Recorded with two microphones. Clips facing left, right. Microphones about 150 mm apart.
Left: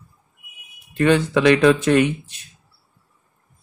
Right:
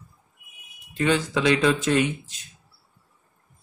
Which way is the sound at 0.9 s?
60° left (ahead or behind).